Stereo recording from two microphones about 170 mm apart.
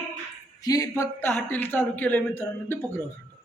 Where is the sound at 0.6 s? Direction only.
20° left (ahead or behind).